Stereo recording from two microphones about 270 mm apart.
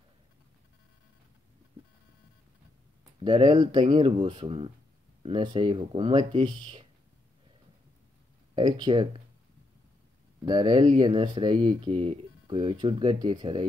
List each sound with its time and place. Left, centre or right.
3.3 s speech: centre
8.5 s speech: centre
10.4 s speech: centre